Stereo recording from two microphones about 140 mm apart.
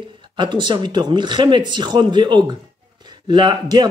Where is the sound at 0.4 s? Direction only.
35° right (ahead or behind).